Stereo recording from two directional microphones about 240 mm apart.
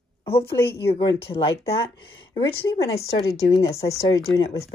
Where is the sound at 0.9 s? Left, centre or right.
Left.